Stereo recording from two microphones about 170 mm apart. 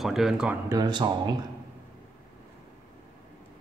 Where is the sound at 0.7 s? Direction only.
25° right (ahead or behind).